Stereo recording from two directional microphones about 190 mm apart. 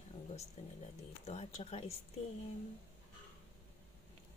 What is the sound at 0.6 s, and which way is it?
Speech, 35° left (ahead or behind).